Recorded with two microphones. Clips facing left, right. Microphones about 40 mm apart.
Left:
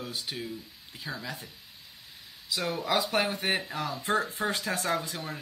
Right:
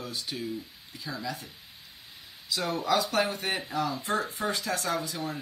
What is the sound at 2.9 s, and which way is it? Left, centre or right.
Speech, left.